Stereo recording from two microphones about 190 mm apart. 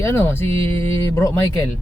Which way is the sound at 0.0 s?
15° left (ahead or behind).